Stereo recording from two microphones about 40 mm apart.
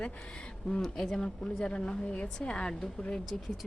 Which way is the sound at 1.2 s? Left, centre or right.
Left.